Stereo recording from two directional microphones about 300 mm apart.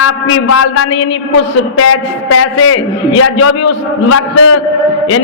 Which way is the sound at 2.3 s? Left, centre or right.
Left.